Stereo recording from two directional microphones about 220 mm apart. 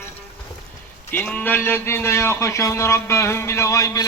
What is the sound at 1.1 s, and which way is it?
A man's voice, 10° left (ahead or behind).